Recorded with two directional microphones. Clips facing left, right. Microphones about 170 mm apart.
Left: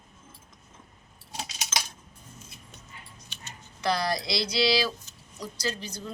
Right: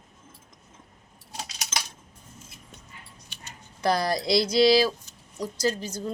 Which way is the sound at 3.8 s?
50° right (ahead or behind).